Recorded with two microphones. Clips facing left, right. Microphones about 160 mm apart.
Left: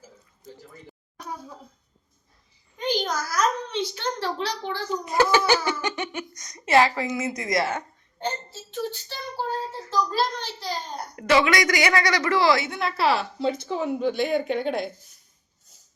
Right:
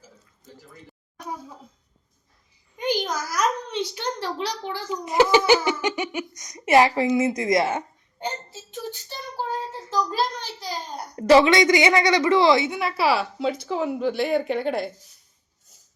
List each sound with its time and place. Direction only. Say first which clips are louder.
2.7 s a child's voice: right 1 dB; 15° right (ahead or behind)
8.2 s a sound: left 1 dB; 15° right (ahead or behind)
11.2 s a woman's voice: right 5 dB; 30° right (ahead or behind)
13.0 s a woman's voice: right 1 dB; 5° right (ahead or behind)